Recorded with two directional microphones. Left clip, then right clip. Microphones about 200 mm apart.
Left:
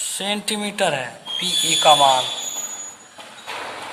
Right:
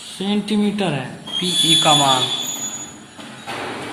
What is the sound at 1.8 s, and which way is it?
Speech, 20° left (ahead or behind).